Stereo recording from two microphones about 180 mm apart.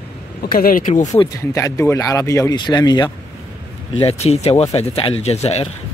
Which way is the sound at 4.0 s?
35° left (ahead or behind).